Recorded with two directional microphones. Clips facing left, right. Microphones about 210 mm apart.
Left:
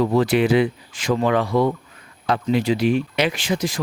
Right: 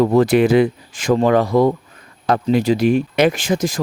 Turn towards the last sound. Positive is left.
turn(degrees=-45)  # may be behind; listen again after turning